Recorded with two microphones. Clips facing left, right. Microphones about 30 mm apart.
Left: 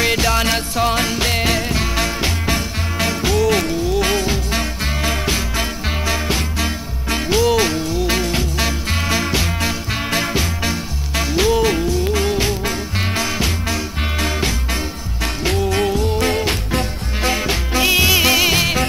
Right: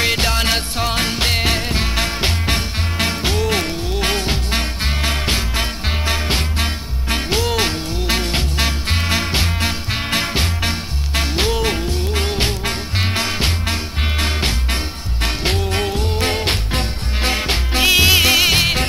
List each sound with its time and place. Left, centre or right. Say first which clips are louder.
0.0 s music: left 1 dB; right
1.4 s music: left 1 dB; right
4.1 s music: left 1 dB; right
8.5 s music: even; right
16.3 s music: left 1 dB; right